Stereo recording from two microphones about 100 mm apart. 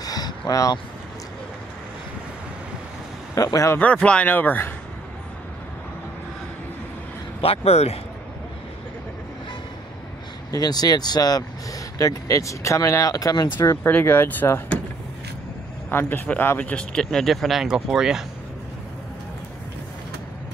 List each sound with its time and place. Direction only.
0.0 s vehicle: 40° left (ahead or behind)
3.3 s speech: 35° left (ahead or behind)
3.7 s speech: 15° left (ahead or behind)
7.4 s speech: 85° left
10.5 s speech: 40° left (ahead or behind)
13.8 s speech: 20° left (ahead or behind)
15.9 s speech: 20° left (ahead or behind); by 18.2 s 5° right (ahead or behind)